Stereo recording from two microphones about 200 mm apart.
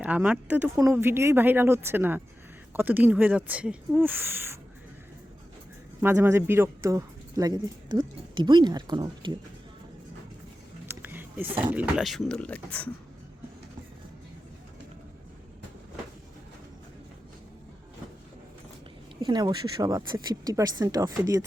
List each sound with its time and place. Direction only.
0.0 s speech: 5° right (ahead or behind)
6.0 s speech: 10° right (ahead or behind)
10.8 s a sound: 10° right (ahead or behind)
11.6 s speech: 5° right (ahead or behind)
19.2 s speech: 20° right (ahead or behind)